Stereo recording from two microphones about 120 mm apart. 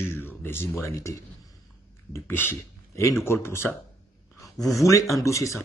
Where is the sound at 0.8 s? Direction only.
25° left (ahead or behind).